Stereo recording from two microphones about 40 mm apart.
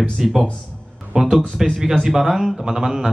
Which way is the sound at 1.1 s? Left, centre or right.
Right.